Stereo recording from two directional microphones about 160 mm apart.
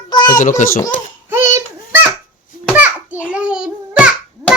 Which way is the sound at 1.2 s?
15° right (ahead or behind).